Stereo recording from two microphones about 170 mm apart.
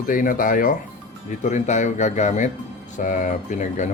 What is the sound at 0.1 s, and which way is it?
Speech, 55° left (ahead or behind).